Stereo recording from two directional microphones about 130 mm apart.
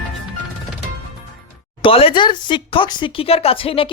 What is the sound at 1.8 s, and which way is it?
Speech, 45° left (ahead or behind).